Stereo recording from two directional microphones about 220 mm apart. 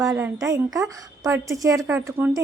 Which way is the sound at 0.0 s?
15° right (ahead or behind).